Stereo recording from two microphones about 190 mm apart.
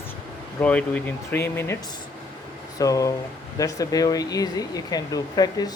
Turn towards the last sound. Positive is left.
turn(degrees=20)  # may be behind; listen again after turning